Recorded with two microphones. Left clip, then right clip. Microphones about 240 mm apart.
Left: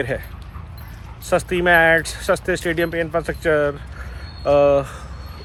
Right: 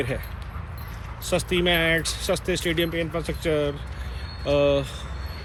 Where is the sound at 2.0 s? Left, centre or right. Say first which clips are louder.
Left 5 dB; centre.